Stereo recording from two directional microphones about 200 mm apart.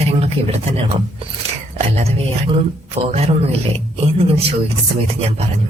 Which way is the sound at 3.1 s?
30° right (ahead or behind).